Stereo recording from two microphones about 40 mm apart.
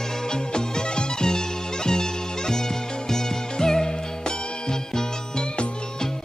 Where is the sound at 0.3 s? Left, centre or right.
Centre.